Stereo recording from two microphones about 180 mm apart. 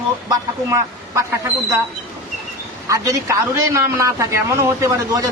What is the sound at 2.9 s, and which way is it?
A man's voice, 20° right (ahead or behind).